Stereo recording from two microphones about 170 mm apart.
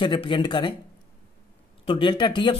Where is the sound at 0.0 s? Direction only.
30° left (ahead or behind).